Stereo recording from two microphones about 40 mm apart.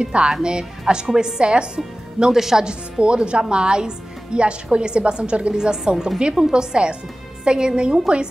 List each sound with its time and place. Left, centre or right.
0.0 s a woman's voice: right
2.3 s a woman's voice: centre
2.6 s a woman's voice: right